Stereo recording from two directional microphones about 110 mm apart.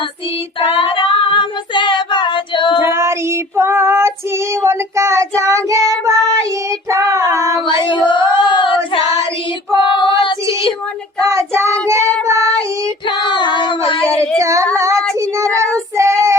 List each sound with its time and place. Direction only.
0.7 s child singing: 50° left (ahead or behind)
2.8 s child singing: 25° right (ahead or behind)
7.6 s child singing: 50° left (ahead or behind)
11.2 s child singing: 25° right (ahead or behind)
13.1 s child singing: 45° left (ahead or behind)
14.3 s singing: 25° right (ahead or behind)
14.8 s child singing: 25° right (ahead or behind)